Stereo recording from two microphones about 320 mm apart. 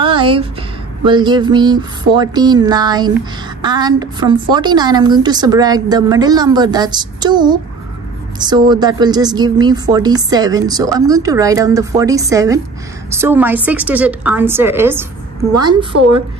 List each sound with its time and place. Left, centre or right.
0.0 s a sound: centre
1.0 s a woman's voice: centre
15.9 s a woman's voice: right